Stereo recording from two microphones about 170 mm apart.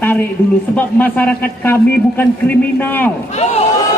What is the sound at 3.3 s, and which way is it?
Speech, 40° left (ahead or behind).